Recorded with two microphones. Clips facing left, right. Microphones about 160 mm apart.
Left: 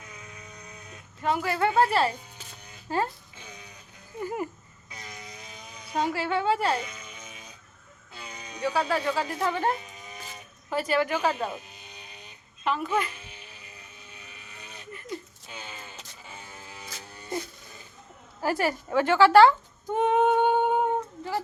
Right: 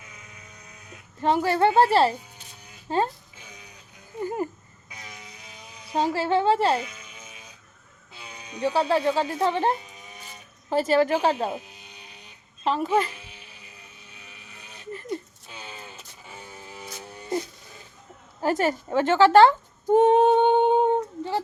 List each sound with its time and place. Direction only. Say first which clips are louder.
1.2 s speech: right 5 dB; 30° right (ahead or behind)
5.0 s vehicle: left 3 dB; 5° right (ahead or behind)
5.9 s speech: right 4 dB; 30° right (ahead or behind)
6.7 s music: right 3 dB; centre (ahead or behind)
8.1 s a sound: right 1 dB; 5° right (ahead or behind)
8.6 s a woman's voice: right 4 dB; 25° right (ahead or behind)
12.6 s a woman's voice: right 4 dB; 30° right (ahead or behind)
16.3 s music: right 3 dB; centre (ahead or behind)
18.4 s speech: right 3 dB; 20° right (ahead or behind)
19.5 s humming: right 5 dB; 35° right (ahead or behind)